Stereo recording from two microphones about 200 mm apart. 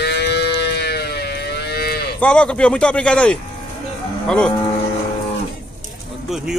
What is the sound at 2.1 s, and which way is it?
Speech, 5° left (ahead or behind).